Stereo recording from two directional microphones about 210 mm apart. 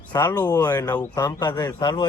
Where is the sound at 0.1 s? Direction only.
20° left (ahead or behind).